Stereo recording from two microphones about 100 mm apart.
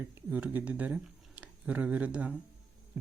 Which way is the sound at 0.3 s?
15° right (ahead or behind).